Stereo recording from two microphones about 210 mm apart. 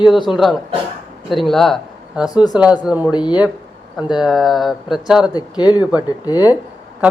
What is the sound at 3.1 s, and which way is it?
Speech, 20° left (ahead or behind).